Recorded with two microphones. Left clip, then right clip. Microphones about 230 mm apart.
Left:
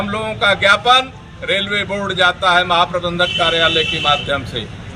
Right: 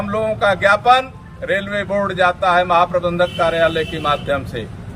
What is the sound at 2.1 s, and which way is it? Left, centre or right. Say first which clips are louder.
A man's voice: left 2 dB; centre.